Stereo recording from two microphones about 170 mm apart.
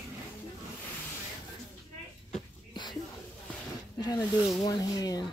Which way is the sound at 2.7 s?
25° left (ahead or behind).